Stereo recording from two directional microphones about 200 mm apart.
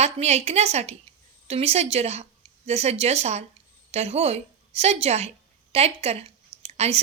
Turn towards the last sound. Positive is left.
turn(degrees=-30)  # may be behind; listen again after turning